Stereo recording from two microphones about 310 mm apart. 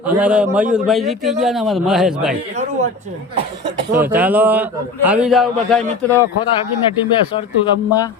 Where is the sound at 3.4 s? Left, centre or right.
Centre.